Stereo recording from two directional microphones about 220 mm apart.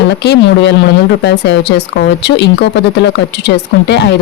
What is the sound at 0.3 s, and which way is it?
Speech, 50° left (ahead or behind).